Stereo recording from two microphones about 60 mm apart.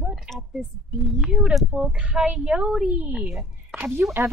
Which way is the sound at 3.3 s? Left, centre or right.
Centre.